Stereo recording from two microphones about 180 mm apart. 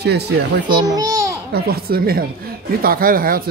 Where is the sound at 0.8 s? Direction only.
20° right (ahead or behind).